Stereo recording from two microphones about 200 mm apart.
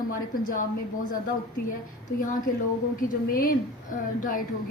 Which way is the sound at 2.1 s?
45° left (ahead or behind).